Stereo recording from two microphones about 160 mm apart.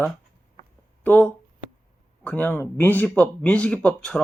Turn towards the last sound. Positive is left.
turn(degrees=5)  # may be behind; listen again after turning